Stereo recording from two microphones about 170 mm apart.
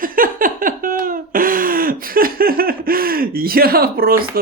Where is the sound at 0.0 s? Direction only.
55° right (ahead or behind).